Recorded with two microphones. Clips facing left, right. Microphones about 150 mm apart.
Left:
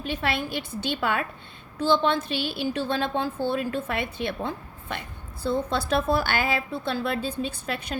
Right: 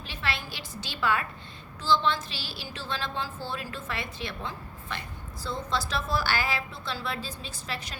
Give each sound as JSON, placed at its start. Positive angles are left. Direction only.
{"t": 0.0, "sound": "a woman's voice", "side_deg": 55}